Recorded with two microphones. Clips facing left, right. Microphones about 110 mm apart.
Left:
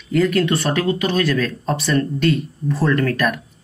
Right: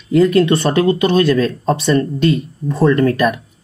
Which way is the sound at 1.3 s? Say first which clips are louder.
Right 5 dB; 35° right (ahead or behind).